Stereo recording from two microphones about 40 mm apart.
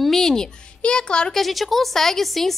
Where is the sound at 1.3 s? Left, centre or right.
Centre.